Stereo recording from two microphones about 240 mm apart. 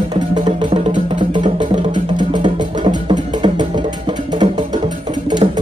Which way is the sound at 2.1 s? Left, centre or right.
Centre.